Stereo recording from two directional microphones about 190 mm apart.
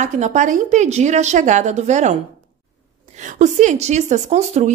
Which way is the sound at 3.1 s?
40° right (ahead or behind).